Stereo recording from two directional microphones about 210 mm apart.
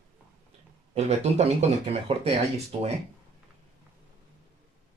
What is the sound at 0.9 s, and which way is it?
Speech, 30° right (ahead or behind).